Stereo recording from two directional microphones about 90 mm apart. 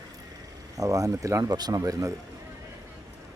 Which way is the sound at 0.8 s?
40° right (ahead or behind).